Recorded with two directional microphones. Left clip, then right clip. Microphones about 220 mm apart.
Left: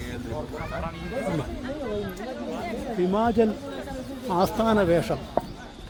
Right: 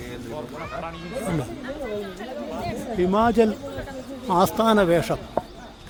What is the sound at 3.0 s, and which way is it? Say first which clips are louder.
Speech: right 3 dB; 20° right (ahead or behind).